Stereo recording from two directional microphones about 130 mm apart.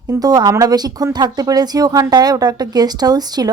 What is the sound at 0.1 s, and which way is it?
A woman's voice, 30° right (ahead or behind).